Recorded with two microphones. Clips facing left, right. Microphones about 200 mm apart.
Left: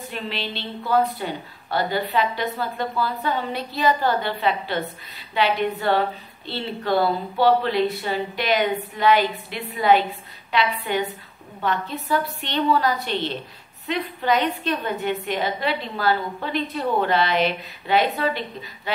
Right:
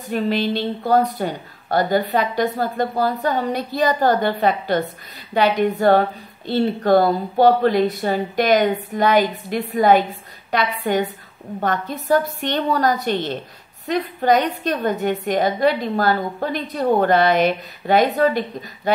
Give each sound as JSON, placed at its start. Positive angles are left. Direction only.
{"t": 0.1, "sound": "a woman's voice", "side_deg": -45}